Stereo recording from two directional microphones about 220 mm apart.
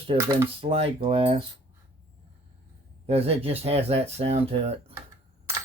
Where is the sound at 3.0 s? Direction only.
25° right (ahead or behind).